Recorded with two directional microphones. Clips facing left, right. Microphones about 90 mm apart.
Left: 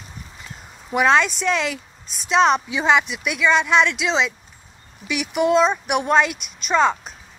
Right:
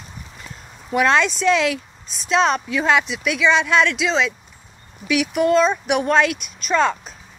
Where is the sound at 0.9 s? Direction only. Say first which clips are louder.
Even; 10° left (ahead or behind).